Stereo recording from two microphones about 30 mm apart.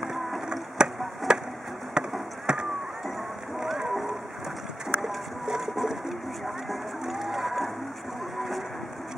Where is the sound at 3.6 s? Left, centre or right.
Centre.